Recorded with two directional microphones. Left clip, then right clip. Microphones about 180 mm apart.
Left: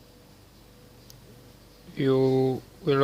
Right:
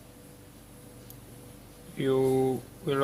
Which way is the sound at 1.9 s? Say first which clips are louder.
Left 3 dB; 45° left (ahead or behind).